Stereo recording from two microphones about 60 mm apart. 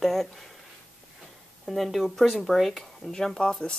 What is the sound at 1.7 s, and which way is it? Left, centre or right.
Speech, centre.